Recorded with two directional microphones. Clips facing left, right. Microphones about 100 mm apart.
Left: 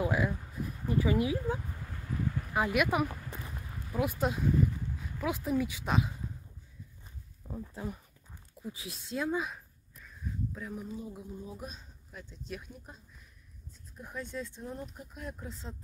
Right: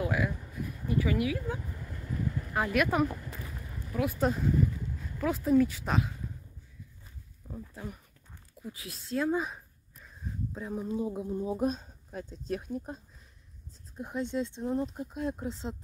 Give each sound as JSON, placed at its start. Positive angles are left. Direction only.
{"t": 0.0, "sound": "a sound", "side_deg": 25}
{"t": 0.8, "sound": "speech", "side_deg": 30}
{"t": 2.5, "sound": "speech", "side_deg": 15}
{"t": 7.4, "sound": "speech", "side_deg": 20}
{"t": 9.3, "sound": "speech", "side_deg": 0}
{"t": 10.5, "sound": "speech", "side_deg": -30}
{"t": 10.9, "sound": "speech", "side_deg": -60}
{"t": 13.9, "sound": "speech", "side_deg": -25}